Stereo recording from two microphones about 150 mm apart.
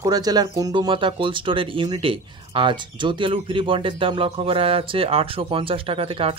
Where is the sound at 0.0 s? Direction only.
25° right (ahead or behind).